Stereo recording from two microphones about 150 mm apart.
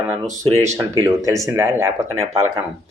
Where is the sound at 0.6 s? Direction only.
20° right (ahead or behind).